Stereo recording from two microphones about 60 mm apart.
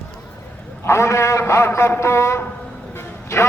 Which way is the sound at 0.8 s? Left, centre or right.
Left.